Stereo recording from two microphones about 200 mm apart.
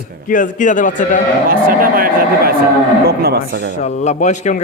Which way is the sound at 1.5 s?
45° right (ahead or behind).